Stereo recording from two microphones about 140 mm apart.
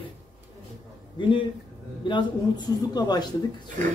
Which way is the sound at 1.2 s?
35° left (ahead or behind).